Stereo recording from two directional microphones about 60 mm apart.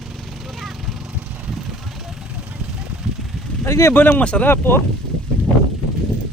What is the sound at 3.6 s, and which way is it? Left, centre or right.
Speech, left.